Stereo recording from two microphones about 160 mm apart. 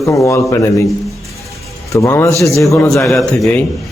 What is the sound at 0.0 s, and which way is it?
Speech, 20° left (ahead or behind).